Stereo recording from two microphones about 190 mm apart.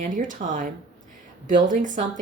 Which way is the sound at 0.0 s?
45° right (ahead or behind).